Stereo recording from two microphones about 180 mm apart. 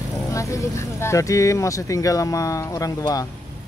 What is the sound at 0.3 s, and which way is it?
Speech, 15° left (ahead or behind).